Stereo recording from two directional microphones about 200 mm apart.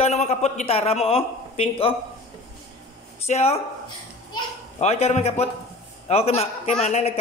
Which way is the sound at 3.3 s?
30° left (ahead or behind).